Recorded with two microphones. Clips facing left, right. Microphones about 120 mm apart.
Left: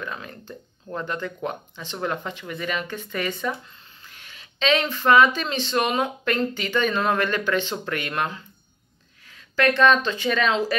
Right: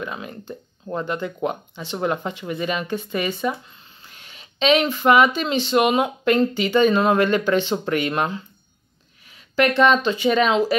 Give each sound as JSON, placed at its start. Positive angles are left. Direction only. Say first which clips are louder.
{"t": 0.0, "sound": "speech", "louder": "right 3 dB", "side_deg": -15}